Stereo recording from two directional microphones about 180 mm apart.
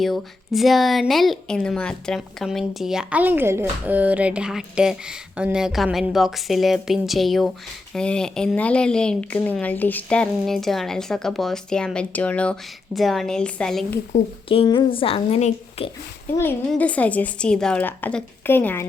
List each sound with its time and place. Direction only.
0.0 s speech: centre (ahead or behind)
14.1 s a woman's voice: 30° left (ahead or behind)
16.4 s a woman's voice: 10° left (ahead or behind)